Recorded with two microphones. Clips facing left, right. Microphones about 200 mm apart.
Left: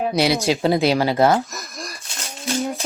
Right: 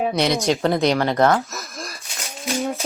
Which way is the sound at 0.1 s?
5° left (ahead or behind).